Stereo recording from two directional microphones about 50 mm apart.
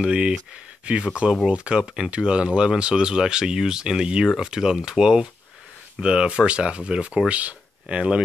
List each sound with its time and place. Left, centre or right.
0.0 s speech: centre